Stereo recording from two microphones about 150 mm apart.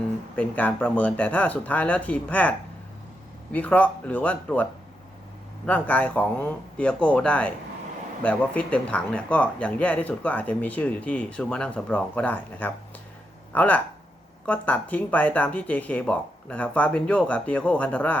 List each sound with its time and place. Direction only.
0.3 s speech: 10° left (ahead or behind)